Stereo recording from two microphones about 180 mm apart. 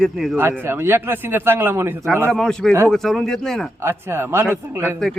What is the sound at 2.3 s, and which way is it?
A man's voice, centre (ahead or behind).